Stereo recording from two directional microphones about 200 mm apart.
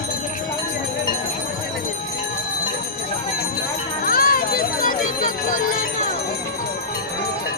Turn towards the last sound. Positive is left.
turn(degrees=40)  # may be behind; listen again after turning